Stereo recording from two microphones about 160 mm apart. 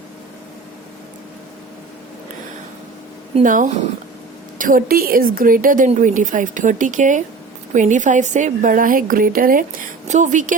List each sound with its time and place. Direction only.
3.4 s a woman's voice: 55° right (ahead or behind)